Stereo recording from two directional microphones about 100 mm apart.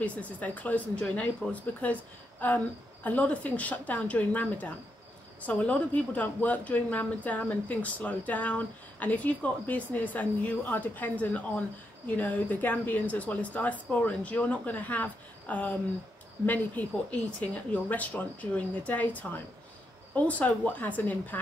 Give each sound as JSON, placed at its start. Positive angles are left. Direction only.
{"t": 0.0, "sound": "a woman's voice", "side_deg": 15}